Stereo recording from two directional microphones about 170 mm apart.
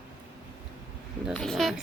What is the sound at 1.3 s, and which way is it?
Speech, centre (ahead or behind).